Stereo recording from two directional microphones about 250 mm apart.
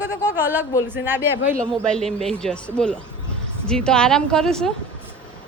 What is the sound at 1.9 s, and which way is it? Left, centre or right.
Speech, centre.